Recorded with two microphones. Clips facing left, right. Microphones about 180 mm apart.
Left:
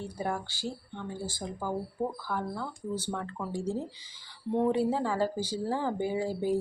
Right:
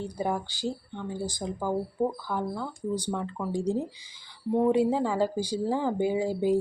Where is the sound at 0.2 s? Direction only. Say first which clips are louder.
Right 4 dB; 20° right (ahead or behind).